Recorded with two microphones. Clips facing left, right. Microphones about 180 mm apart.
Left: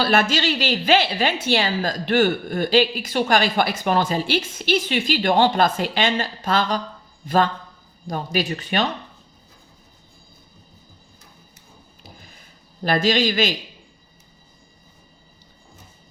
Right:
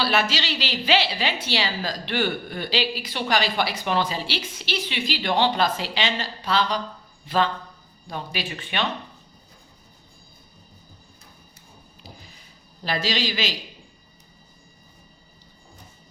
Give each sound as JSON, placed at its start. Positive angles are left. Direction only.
{"t": 0.0, "sound": "speech", "side_deg": 50}
{"t": 12.8, "sound": "speech", "side_deg": 50}